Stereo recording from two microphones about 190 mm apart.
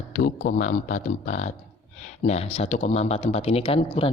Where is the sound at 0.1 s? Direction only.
50° left (ahead or behind).